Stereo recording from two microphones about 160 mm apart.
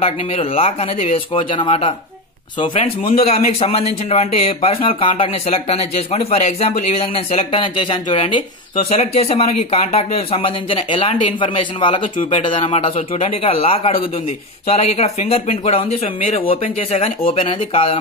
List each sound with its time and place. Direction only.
0.0 s speech: 35° left (ahead or behind)